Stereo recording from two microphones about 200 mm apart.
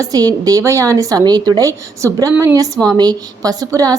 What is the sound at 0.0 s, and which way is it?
A woman's voice, 20° right (ahead or behind).